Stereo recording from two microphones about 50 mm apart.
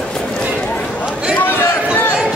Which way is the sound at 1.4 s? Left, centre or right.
Left.